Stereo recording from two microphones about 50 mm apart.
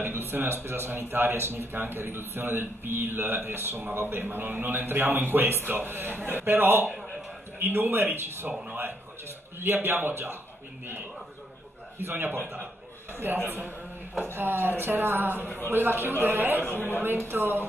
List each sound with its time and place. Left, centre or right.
0.0 s speech: right
9.6 s speech: right
12.0 s speech: right
16.6 s speech: left
17.0 s speech: right